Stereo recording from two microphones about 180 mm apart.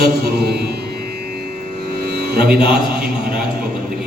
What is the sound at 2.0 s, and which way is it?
Music, 60° right (ahead or behind).